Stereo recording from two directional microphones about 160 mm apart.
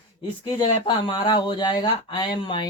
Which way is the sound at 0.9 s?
30° left (ahead or behind).